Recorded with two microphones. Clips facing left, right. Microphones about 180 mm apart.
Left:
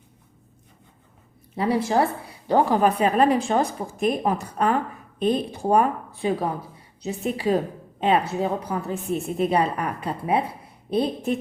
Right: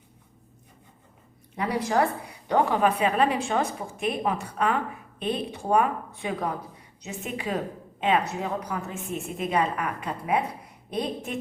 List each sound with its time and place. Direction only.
1.5 s a woman's voice: 30° left (ahead or behind)